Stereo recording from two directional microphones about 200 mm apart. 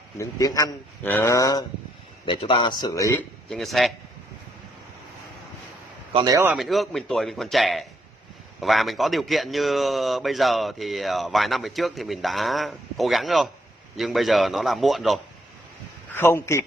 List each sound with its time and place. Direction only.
0.2 s a man's voice: 15° left (ahead or behind)
3.4 s speech: centre (ahead or behind)
6.1 s a man's voice: 15° right (ahead or behind)
6.5 s speech: centre (ahead or behind)
16.1 s speech: 10° left (ahead or behind)